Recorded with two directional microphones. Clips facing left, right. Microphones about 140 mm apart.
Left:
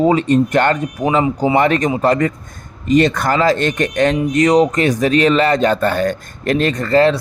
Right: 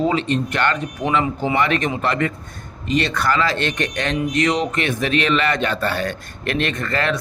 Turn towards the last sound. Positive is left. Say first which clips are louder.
# left 9 dB
turn(degrees=30)  # may be behind; listen again after turning